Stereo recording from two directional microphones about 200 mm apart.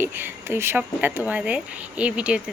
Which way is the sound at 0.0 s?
10° right (ahead or behind).